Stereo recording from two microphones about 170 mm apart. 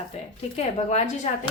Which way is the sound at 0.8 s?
40° left (ahead or behind).